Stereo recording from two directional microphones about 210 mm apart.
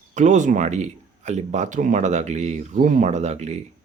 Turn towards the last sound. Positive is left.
turn(degrees=-30)  # may be behind; listen again after turning